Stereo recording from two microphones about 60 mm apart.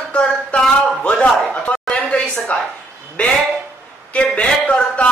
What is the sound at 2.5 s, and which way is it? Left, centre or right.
A man's voice, left.